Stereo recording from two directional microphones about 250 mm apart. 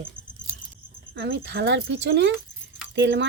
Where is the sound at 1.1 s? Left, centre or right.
Right.